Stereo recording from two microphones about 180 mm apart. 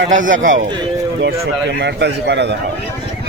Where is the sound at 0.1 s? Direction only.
45° right (ahead or behind).